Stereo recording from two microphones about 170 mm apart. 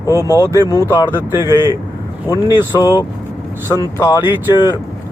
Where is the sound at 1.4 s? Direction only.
25° left (ahead or behind).